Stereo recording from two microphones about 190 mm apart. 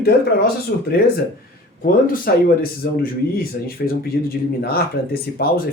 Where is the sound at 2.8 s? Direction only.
60° left (ahead or behind).